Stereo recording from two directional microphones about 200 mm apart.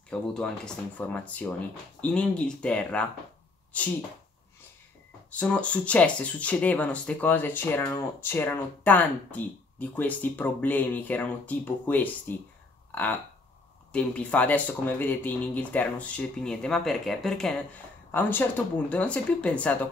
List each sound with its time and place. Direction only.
0.1 s speech: 5° left (ahead or behind)
5.3 s speech: 5° left (ahead or behind)